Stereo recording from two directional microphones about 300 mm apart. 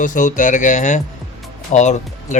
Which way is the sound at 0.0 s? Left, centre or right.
Left.